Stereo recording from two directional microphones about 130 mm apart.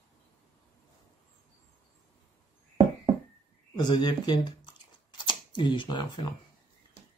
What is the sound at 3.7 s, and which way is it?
Speech, 35° left (ahead or behind).